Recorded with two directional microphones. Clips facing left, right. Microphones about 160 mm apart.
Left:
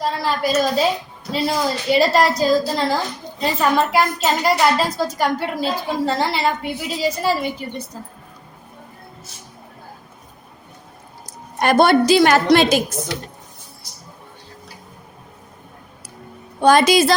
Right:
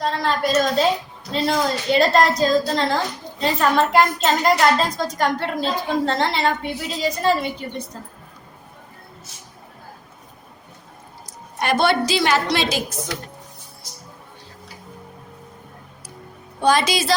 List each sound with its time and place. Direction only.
0.0 s a woman's voice: 5° left (ahead or behind)
11.6 s a woman's voice: 45° left (ahead or behind)
16.6 s a woman's voice: 50° left (ahead or behind)